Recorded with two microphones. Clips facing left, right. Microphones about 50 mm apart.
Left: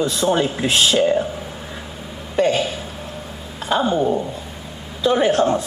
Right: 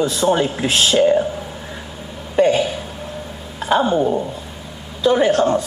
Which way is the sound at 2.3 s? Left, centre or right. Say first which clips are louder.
Right 3 dB; centre.